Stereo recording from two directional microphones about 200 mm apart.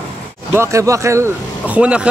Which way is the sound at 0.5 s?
15° right (ahead or behind).